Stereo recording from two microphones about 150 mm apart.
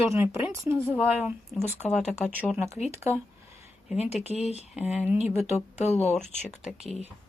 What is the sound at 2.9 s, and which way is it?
Speech, 20° right (ahead or behind).